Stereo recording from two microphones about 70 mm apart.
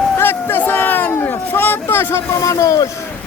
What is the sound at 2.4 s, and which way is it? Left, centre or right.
Speech, left.